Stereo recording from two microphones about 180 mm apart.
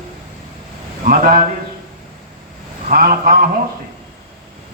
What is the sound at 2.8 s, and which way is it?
Speech, 50° right (ahead or behind).